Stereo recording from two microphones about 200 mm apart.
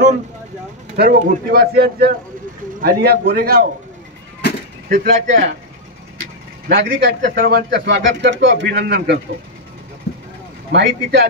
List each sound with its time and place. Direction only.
0.9 s speech: 50° right (ahead or behind)
4.8 s speech: 40° right (ahead or behind)
6.7 s speech: 50° right (ahead or behind)
10.7 s speech: 60° right (ahead or behind)